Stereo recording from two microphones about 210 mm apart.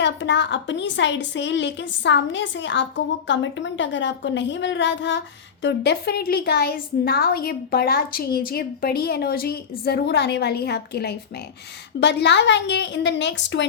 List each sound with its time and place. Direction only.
0.0 s a woman's voice: 60° left (ahead or behind)